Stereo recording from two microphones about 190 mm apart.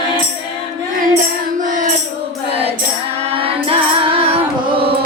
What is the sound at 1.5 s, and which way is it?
Music, 40° right (ahead or behind).